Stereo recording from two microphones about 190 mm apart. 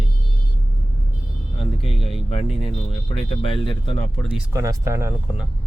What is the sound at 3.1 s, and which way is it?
Speech, 30° left (ahead or behind).